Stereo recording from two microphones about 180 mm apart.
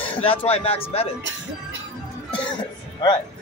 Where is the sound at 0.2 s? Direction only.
30° left (ahead or behind).